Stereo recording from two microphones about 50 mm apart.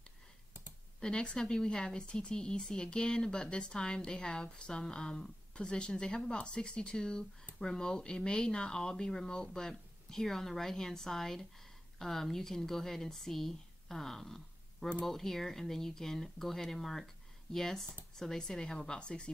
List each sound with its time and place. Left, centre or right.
1.0 s a woman's voice: centre